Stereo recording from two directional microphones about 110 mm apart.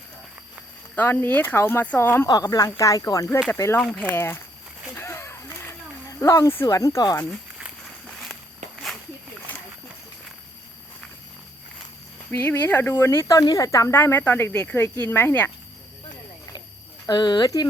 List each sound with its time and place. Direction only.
0.9 s speech: 15° left (ahead or behind)
2.2 s speech: 35° left (ahead or behind)
3.8 s speech: centre (ahead or behind)
4.1 s speech: 20° left (ahead or behind)
4.9 s a sound: 25° left (ahead or behind)
6.1 s speech: 30° left (ahead or behind)
8.0 s walk: 5° left (ahead or behind)
12.3 s speech: 20° left (ahead or behind)
13.2 s speech: 40° left (ahead or behind); by 15.5 s 20° left (ahead or behind)
17.1 s speech: 40° left (ahead or behind)